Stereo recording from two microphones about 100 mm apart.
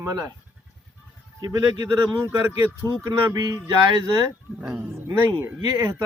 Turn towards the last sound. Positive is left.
turn(degrees=-30)  # may be behind; listen again after turning